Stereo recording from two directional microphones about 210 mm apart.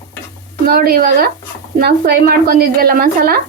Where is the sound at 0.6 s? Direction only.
45° right (ahead or behind).